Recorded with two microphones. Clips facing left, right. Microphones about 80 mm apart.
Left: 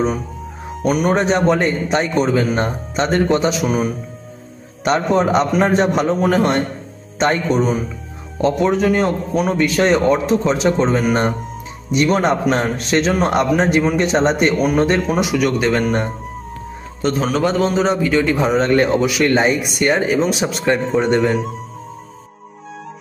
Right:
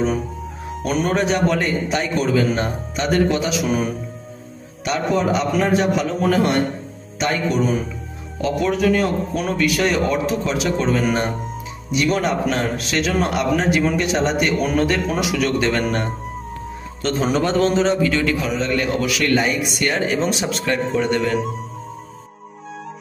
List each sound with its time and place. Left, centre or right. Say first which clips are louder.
0.8 s speech: left 4 dB; centre
1.1 s a man's voice: left 2 dB; left
3.6 s speech: left 2 dB; centre
4.8 s a man's voice: left 4 dB; left
15.1 s speech: left 3 dB; centre
17.0 s a man's voice: left 4 dB; centre
17.4 s speech: left 1 dB; centre; by 18.5 s left
18.5 s a man's voice: left 7 dB; left
18.9 s a man's voice: left 4 dB; left
21.2 s speech: left 3 dB; centre